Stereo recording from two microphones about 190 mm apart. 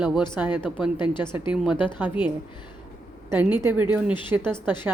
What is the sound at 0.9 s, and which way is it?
Speech, 25° left (ahead or behind).